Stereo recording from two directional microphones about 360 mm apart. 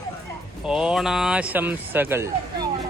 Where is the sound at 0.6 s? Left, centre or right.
Centre.